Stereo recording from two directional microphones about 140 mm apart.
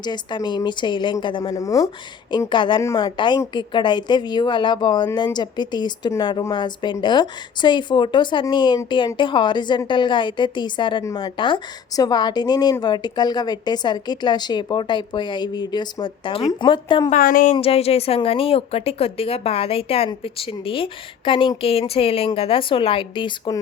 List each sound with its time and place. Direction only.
0.0 s a woman's voice: 30° left (ahead or behind)
2.5 s a woman's voice: 35° left (ahead or behind)
17.1 s speech: 85° left
17.5 s a woman's voice: 45° left (ahead or behind)